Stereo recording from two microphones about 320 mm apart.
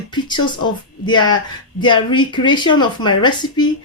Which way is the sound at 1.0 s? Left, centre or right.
Centre.